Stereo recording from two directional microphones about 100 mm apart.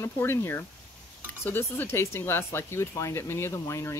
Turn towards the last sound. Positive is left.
turn(degrees=30)  # may be behind; listen again after turning